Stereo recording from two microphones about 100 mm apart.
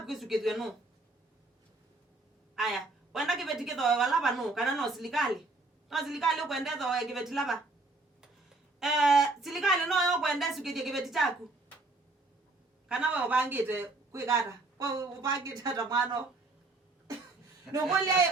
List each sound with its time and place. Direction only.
0.0 s speech: 5° right (ahead or behind)
2.6 s a woman's voice: 5° right (ahead or behind)
8.8 s speech: 5° right (ahead or behind)
12.9 s a man's voice: 10° right (ahead or behind)
14.8 s a woman's voice: 40° right (ahead or behind)